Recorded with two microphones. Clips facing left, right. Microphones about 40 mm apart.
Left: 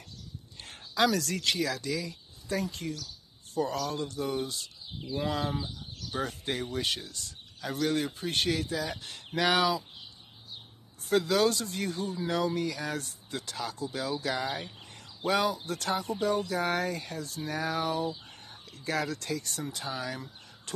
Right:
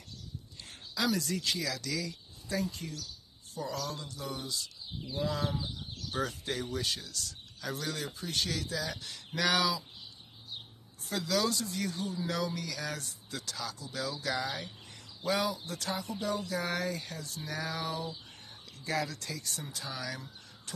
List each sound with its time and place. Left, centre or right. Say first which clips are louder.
0.6 s a sound: left 7 dB; left
1.0 s speech: left 4 dB; left
1.8 s speech: left 3 dB; left
2.4 s speech: left 3 dB; left
3.5 s speech: left 6 dB; left
6.2 s speech: left 4 dB; left
7.8 s speech: left 13 dB; left
11.1 s speech: left 6 dB; left
15.2 s speech: left 4 dB; left
19.9 s speech: left 2 dB; left
20.7 s a sound: left 7 dB; left